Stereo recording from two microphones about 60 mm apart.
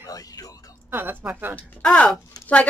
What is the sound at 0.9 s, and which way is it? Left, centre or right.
Speech, right.